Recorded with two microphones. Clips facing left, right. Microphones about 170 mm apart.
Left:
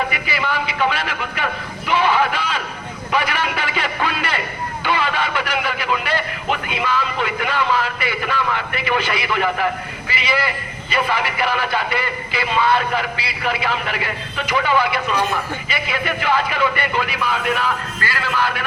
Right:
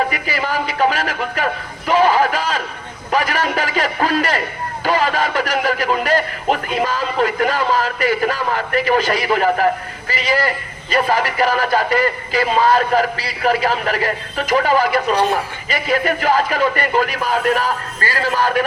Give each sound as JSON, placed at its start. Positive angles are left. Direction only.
{"t": 0.1, "sound": "speech", "side_deg": -40}
{"t": 1.9, "sound": "a sound", "side_deg": -40}
{"t": 3.1, "sound": "speech", "side_deg": -40}